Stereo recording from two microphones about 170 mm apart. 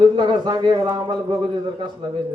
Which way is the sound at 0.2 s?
25° right (ahead or behind).